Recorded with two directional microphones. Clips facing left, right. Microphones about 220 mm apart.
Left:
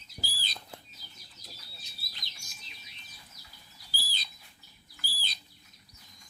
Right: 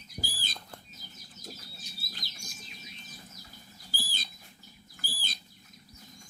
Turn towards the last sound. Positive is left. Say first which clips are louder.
# right 3 dB
turn(degrees=-50)  # may be behind; listen again after turning